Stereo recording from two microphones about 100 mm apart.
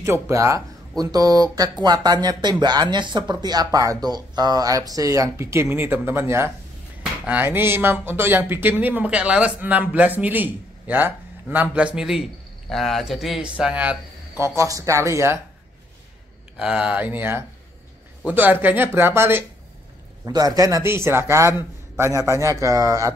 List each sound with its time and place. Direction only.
0.0 s speech: 30° right (ahead or behind); by 14.4 s 15° right (ahead or behind)
14.4 s speech: 30° right (ahead or behind)
16.5 s speech: 10° right (ahead or behind)
20.2 s speech: 35° right (ahead or behind)